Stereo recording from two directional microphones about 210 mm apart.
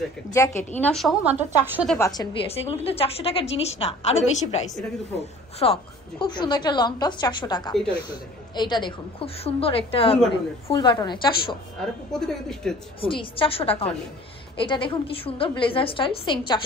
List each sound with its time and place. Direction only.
0.3 s a woman's voice: 15° left (ahead or behind)
0.7 s a woman's voice: 5° left (ahead or behind)
2.0 s a woman's voice: 15° left (ahead or behind)
2.4 s a woman's voice: 30° left (ahead or behind)
11.8 s a woman's voice: centre (ahead or behind)
13.0 s a woman's voice: 25° left (ahead or behind)